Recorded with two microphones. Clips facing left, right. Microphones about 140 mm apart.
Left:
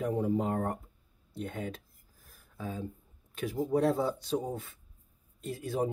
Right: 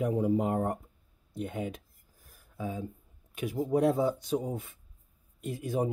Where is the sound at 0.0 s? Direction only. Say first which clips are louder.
Right 2 dB; 15° right (ahead or behind).